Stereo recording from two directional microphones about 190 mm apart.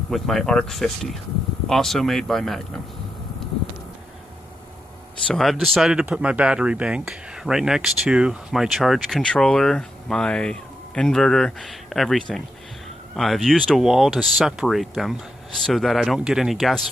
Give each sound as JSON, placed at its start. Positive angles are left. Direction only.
{"t": 0.1, "sound": "speech", "side_deg": 0}
{"t": 5.3, "sound": "speech", "side_deg": 0}